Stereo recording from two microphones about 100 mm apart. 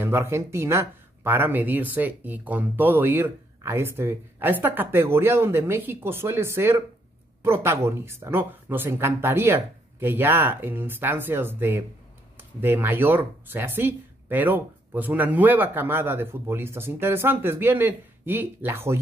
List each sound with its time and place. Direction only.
0.0 s speech: 25° right (ahead or behind)